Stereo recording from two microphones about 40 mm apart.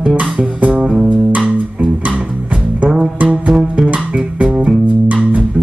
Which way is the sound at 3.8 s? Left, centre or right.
Right.